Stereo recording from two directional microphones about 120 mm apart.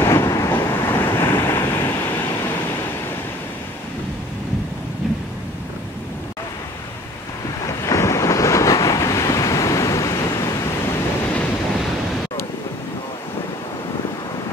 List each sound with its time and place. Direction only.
0.0 s waves: 25° left (ahead or behind)
7.6 s waves: 25° left (ahead or behind)